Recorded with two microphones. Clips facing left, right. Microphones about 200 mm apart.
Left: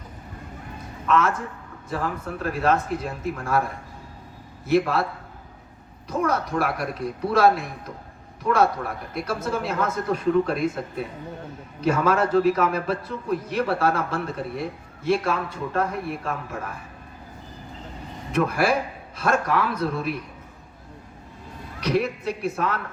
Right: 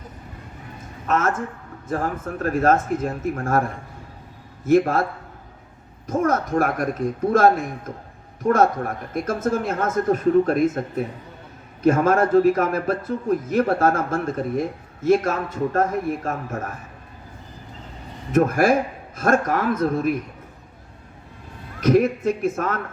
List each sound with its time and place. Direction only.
1.0 s a man's voice: 45° right (ahead or behind)
4.6 s a man's voice: 45° right (ahead or behind)
6.1 s a man's voice: 45° right (ahead or behind)
18.3 s a man's voice: 45° right (ahead or behind)
21.8 s a man's voice: 45° right (ahead or behind)